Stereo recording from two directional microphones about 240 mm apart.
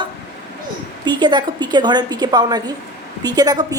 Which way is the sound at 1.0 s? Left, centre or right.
Centre.